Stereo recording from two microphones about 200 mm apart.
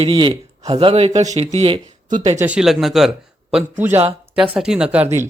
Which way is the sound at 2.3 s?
5° right (ahead or behind).